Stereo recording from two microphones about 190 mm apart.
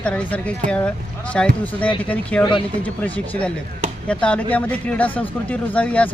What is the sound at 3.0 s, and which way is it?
Speech, 10° left (ahead or behind).